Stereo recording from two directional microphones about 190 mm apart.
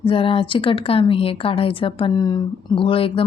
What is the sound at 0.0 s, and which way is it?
A woman's voice, 25° left (ahead or behind).